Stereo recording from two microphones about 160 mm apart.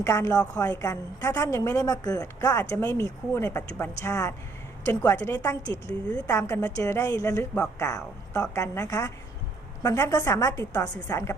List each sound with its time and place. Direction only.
0.0 s a woman's voice: 20° left (ahead or behind)
6.1 s speech: 10° left (ahead or behind)
6.3 s a woman's voice: 20° left (ahead or behind)